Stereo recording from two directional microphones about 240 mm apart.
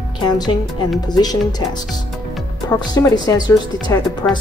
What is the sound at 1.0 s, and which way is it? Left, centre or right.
Speech, centre.